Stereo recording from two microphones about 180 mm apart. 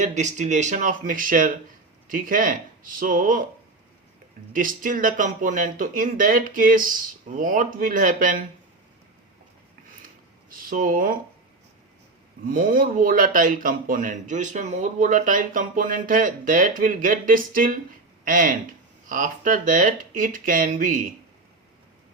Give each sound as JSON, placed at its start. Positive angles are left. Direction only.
{"t": 0.0, "sound": "speech", "side_deg": -40}
{"t": 4.5, "sound": "speech", "side_deg": -50}
{"t": 10.5, "sound": "speech", "side_deg": -50}
{"t": 12.5, "sound": "speech", "side_deg": -50}